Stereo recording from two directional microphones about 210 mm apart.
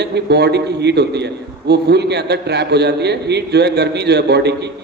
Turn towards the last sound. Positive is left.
turn(degrees=-55)  # may be behind; listen again after turning